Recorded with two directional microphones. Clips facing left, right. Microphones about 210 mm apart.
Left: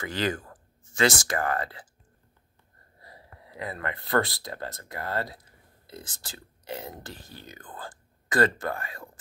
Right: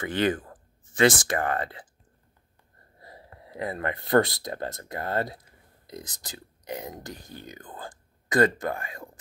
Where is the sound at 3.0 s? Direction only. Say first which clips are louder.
Right 3 dB; 25° right (ahead or behind).